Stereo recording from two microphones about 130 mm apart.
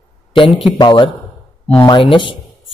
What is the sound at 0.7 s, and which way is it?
A man's voice, 35° left (ahead or behind).